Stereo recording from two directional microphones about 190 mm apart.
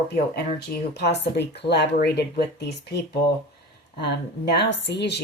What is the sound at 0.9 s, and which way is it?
Speech, 65° left (ahead or behind).